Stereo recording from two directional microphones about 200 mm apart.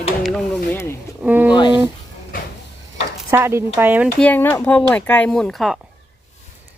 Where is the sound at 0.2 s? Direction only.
5° left (ahead or behind).